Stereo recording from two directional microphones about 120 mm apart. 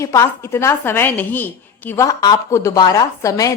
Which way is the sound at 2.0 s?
25° left (ahead or behind).